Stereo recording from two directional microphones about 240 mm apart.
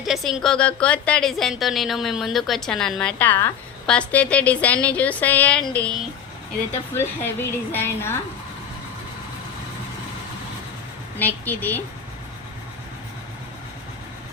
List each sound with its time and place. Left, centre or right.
0.0 s a woman's voice: centre
6.9 s a woman's voice: centre
11.2 s a woman's voice: centre